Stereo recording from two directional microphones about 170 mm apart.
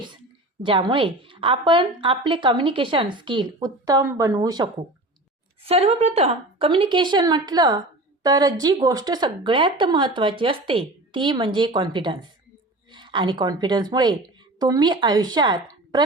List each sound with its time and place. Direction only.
0.6 s a woman's voice: 30° right (ahead or behind)
5.6 s a woman's voice: 35° right (ahead or behind)